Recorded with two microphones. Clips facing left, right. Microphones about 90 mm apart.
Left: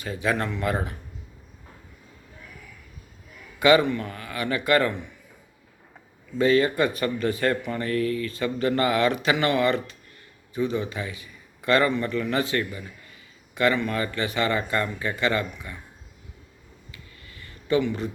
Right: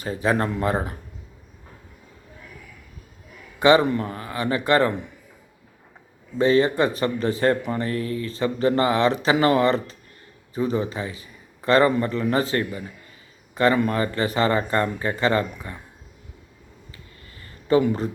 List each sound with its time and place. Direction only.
0.0 s a man's voice: 35° right (ahead or behind)
3.6 s a man's voice: 35° right (ahead or behind)
6.4 s a man's voice: 30° right (ahead or behind)
16.9 s a sound: 35° right (ahead or behind)